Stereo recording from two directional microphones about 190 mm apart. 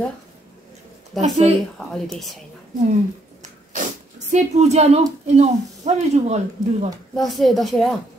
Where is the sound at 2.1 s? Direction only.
Centre (ahead or behind).